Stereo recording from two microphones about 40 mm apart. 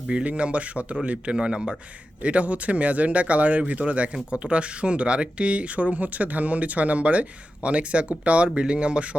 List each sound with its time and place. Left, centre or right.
0.1 s speech: right
1.4 s speech: right
2.2 s speech: right